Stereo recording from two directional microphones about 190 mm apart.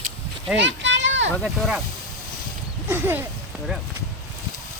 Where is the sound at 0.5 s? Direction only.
70° right (ahead or behind).